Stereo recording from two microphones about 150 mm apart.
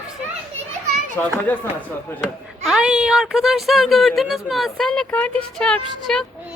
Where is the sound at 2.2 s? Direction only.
5° right (ahead or behind).